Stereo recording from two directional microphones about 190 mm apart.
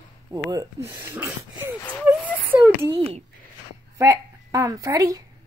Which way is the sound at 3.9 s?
15° right (ahead or behind).